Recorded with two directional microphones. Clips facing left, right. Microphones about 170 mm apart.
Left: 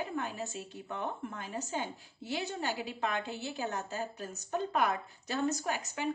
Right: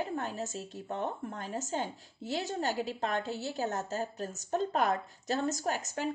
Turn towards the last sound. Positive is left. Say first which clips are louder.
# right 2 dB
turn(degrees=-45)  # may be behind; listen again after turning